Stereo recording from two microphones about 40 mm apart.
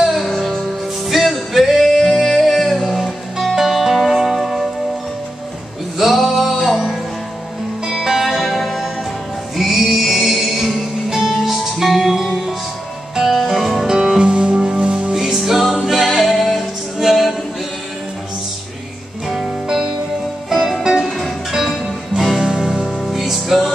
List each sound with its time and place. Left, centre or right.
0.1 s music: centre
5.9 s music: centre
7.8 s music: centre
13.8 s music: centre
15.1 s music: centre
19.2 s music: centre
21.5 s music: centre